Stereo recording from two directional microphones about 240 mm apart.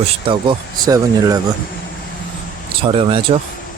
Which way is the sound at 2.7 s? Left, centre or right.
Right.